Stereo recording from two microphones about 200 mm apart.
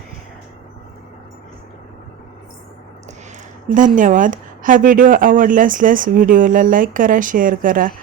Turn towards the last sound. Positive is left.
turn(degrees=-40)  # may be behind; listen again after turning